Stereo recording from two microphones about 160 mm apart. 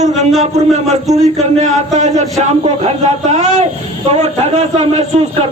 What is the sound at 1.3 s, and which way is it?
A man's voice, 45° right (ahead or behind).